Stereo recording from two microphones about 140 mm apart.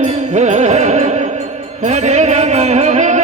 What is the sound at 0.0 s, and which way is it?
Music, 55° right (ahead or behind).